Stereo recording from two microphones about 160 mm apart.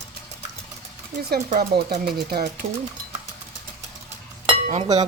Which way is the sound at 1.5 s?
75° right (ahead or behind).